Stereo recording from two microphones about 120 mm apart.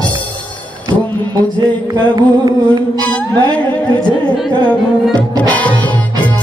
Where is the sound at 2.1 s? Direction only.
35° right (ahead or behind).